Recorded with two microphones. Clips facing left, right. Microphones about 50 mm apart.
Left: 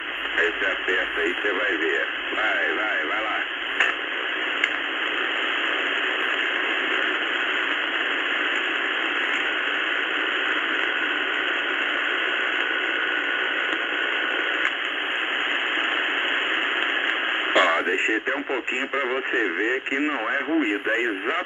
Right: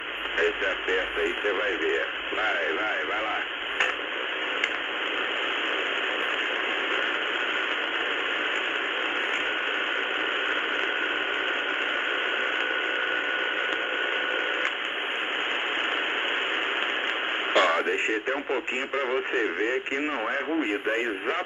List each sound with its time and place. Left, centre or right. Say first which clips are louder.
0.4 s speech: left 2 dB; centre
17.6 s radio: left 2 dB; centre
18.5 s speech: left 2 dB; centre